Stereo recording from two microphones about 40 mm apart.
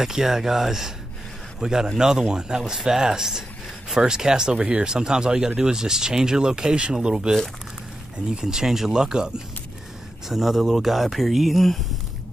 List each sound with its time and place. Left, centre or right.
0.0 s speech: centre